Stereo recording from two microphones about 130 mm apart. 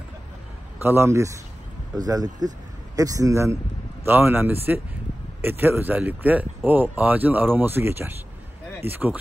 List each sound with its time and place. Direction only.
0.8 s speech: 20° right (ahead or behind)